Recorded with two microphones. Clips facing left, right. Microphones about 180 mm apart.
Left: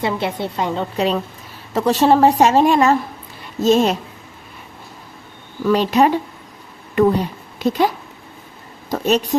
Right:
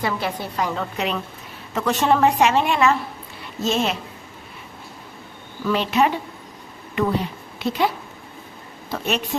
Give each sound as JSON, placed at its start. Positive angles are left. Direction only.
{"t": 0.0, "sound": "a woman's voice", "side_deg": 25}
{"t": 5.6, "sound": "a woman's voice", "side_deg": 40}
{"t": 8.9, "sound": "a woman's voice", "side_deg": 40}